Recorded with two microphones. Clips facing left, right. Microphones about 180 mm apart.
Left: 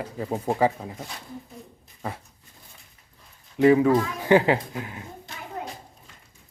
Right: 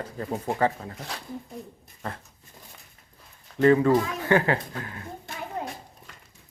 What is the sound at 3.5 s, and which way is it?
Speech, 10° left (ahead or behind).